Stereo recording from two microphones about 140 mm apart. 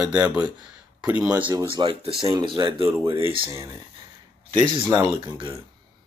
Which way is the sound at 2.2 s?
30° right (ahead or behind).